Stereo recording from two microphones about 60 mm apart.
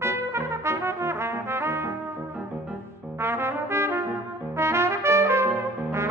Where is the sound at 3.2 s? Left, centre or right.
Right.